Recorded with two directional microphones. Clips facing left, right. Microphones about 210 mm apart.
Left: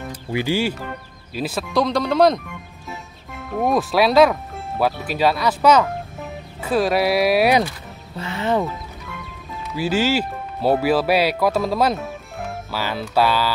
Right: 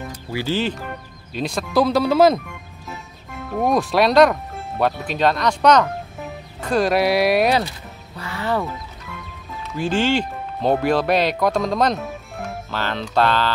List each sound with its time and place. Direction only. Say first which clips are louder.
0.3 s speech: left 2 dB; 15° left (ahead or behind); by 2.4 s 5° right (ahead or behind)
3.5 s speech: even; centre (ahead or behind)
8.2 s speech: left 2 dB; 20° left (ahead or behind)
9.8 s speech: even; 5° left (ahead or behind)